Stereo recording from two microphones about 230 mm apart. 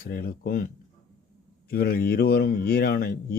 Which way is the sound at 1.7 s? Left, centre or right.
Left.